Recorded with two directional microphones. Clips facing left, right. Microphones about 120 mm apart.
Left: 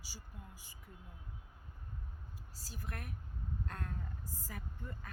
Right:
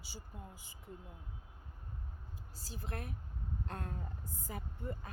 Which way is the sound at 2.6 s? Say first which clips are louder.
Right 3 dB; 25° right (ahead or behind).